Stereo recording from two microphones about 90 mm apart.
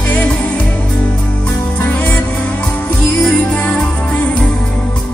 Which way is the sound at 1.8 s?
20° left (ahead or behind).